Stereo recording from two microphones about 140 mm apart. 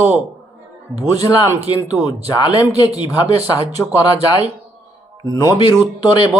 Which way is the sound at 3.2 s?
45° right (ahead or behind).